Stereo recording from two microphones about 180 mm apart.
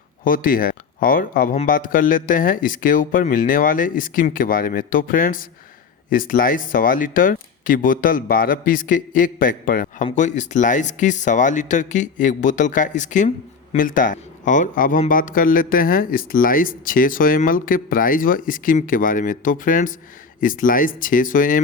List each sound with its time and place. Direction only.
0.3 s speech: 50° left (ahead or behind)